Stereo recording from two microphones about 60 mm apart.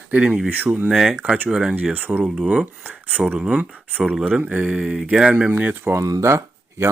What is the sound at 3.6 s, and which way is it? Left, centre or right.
Speech, right.